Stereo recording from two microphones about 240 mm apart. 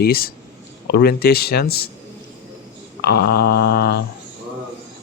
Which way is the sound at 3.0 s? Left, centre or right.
Left.